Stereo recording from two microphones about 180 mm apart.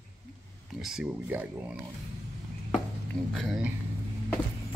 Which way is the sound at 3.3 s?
Centre (ahead or behind).